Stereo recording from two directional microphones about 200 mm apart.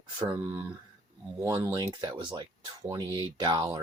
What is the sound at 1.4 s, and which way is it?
Speech, 15° right (ahead or behind).